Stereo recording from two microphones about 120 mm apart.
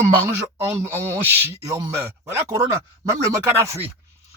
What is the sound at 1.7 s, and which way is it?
Speech, 30° right (ahead or behind).